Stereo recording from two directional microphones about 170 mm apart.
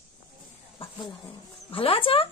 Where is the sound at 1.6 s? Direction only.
35° left (ahead or behind).